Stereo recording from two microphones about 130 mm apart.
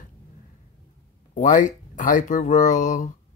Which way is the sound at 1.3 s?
75° left (ahead or behind).